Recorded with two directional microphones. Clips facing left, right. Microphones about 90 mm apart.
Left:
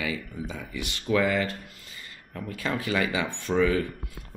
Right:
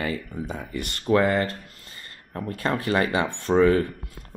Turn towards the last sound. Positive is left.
turn(degrees=-40)  # may be behind; listen again after turning